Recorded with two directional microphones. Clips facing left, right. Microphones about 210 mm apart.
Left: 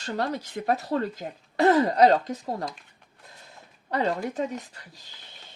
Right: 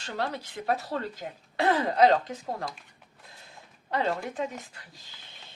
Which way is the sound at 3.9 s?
40° left (ahead or behind).